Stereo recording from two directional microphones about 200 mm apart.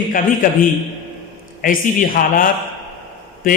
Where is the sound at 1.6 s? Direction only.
45° left (ahead or behind).